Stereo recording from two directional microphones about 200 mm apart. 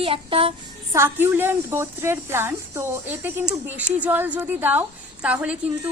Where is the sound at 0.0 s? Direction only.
25° right (ahead or behind).